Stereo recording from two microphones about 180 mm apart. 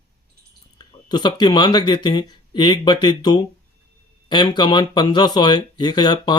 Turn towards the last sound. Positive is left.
turn(degrees=25)  # may be behind; listen again after turning